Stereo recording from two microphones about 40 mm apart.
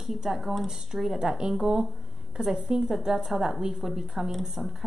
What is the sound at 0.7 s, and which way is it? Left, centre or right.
Speech, centre.